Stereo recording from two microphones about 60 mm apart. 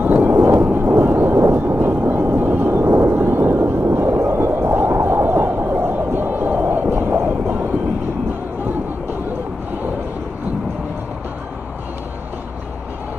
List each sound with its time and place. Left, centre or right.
0.2 s a sound: right
3.8 s music: right
4.6 s whale vocalization: right
7.1 s vehicle: right